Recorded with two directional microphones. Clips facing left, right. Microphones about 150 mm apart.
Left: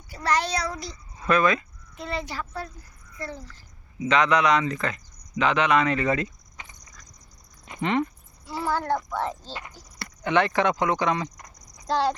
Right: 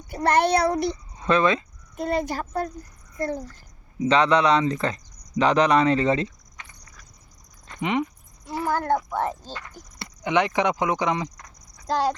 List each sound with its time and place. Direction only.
0.1 s speech: 55° right (ahead or behind)
1.2 s speech: 25° right (ahead or behind)
2.0 s a child's voice: 50° right (ahead or behind)
4.0 s speech: 30° right (ahead or behind)
7.8 s cricket: 10° right (ahead or behind)
8.9 s speech: 15° right (ahead or behind)
9.5 s speech: 15° left (ahead or behind)
9.7 s speech: 15° right (ahead or behind)
11.3 s a sound: 10° left (ahead or behind)
11.9 s speech: 10° right (ahead or behind)